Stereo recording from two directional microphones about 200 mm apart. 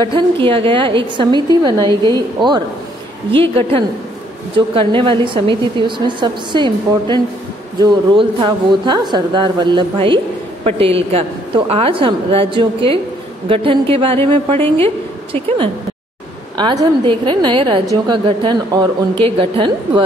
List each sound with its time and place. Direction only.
0.0 s speech: 25° right (ahead or behind)
16.5 s speech: 20° right (ahead or behind)